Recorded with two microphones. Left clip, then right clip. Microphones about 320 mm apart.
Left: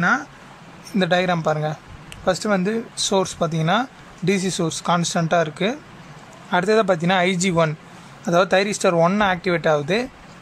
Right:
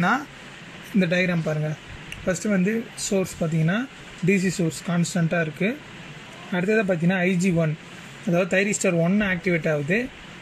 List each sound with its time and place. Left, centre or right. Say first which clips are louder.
0.9 s speech: left 4 dB; left